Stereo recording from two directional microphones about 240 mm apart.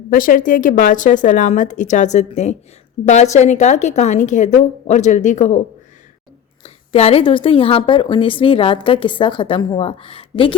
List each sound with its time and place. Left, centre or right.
0.1 s a woman's voice: left